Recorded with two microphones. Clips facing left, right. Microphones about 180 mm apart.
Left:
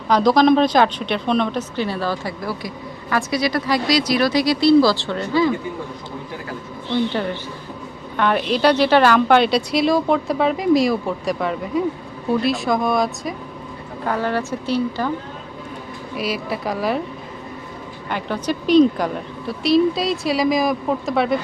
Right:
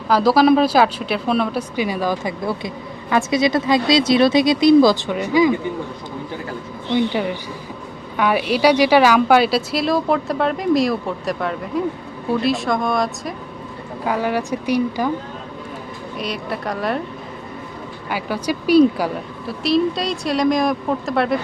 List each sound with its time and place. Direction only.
0.1 s speech: 5° right (ahead or behind)
6.9 s a woman's voice: 10° right (ahead or behind)
14.0 s speech: 10° right (ahead or behind)
16.1 s a woman's voice: 5° left (ahead or behind)
18.1 s a woman's voice: 10° right (ahead or behind)